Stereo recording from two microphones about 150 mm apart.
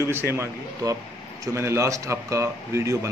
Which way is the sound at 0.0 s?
15° right (ahead or behind).